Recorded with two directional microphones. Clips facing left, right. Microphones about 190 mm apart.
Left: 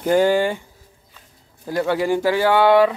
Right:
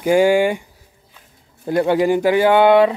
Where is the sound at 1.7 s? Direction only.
20° right (ahead or behind).